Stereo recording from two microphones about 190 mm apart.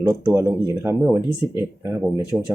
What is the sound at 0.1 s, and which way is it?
Speech, 15° right (ahead or behind).